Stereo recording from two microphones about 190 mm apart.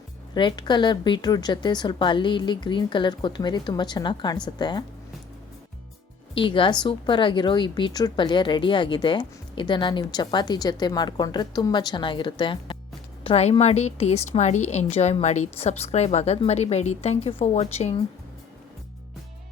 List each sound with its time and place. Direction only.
0.3 s a woman's voice: 25° left (ahead or behind)
6.3 s a woman's voice: 25° left (ahead or behind)